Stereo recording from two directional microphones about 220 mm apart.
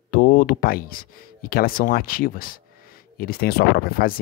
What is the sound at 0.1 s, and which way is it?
Speech, 40° left (ahead or behind).